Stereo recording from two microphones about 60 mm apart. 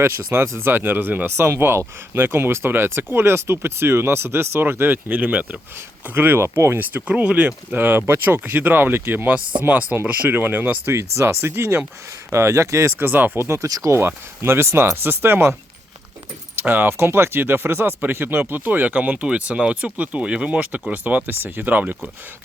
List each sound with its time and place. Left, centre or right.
0.0 s speech: right
1.5 s speech: right
10.0 s speech: right
10.9 s speech: right
12.3 s speech: right
13.0 s speech: right
13.4 s speech: right
13.7 s speech: right
14.4 s speech: right
16.6 s speech: right